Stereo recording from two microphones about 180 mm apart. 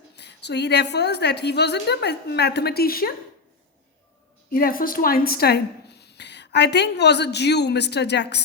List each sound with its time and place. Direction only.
0.2 s speech: 70° left (ahead or behind)
4.5 s speech: 55° left (ahead or behind); by 8.4 s 70° left (ahead or behind)